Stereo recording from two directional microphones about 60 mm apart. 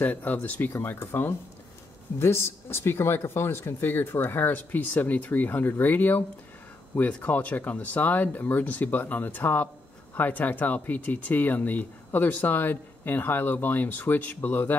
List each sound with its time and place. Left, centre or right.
0.0 s speech: left